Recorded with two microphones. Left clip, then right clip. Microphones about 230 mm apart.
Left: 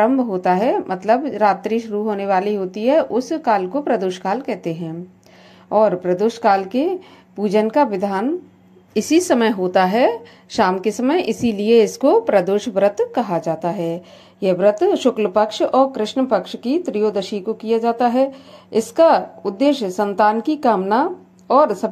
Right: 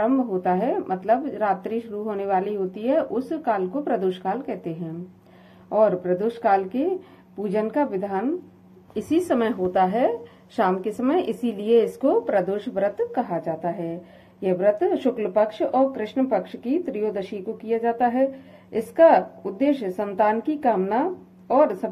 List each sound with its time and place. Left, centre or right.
0.0 s speech: left